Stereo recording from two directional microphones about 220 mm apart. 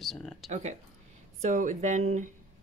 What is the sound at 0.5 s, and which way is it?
Speech, 30° right (ahead or behind).